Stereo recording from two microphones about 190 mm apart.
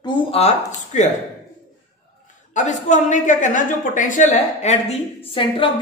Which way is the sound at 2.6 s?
40° left (ahead or behind).